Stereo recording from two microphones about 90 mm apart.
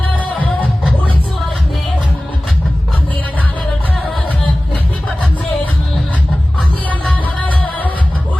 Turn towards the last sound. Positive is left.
turn(degrees=15)  # may be behind; listen again after turning